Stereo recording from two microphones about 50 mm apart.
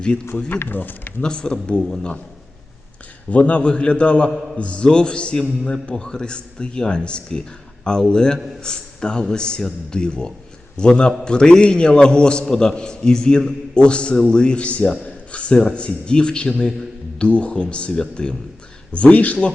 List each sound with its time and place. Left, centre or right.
0.3 s speech: left
1.2 s a man's voice: centre
3.2 s a man's voice: left